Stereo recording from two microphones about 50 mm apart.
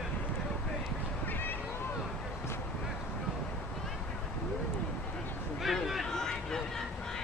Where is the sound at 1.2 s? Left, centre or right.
Left.